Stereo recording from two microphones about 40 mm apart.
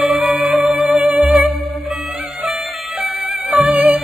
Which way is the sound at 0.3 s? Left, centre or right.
Right.